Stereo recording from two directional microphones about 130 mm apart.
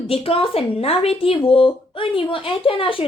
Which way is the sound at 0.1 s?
45° left (ahead or behind).